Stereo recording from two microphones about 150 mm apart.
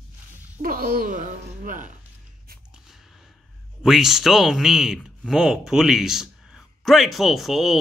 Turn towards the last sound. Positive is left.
turn(degrees=0)  # may be behind; listen again after turning